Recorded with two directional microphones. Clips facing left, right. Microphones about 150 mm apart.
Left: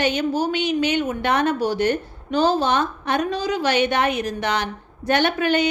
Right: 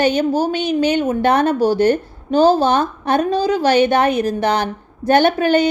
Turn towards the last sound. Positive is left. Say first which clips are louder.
# right 5 dB
turn(degrees=-35)  # may be behind; listen again after turning